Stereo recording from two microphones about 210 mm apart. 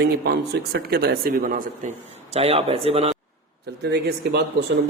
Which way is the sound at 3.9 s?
55° right (ahead or behind).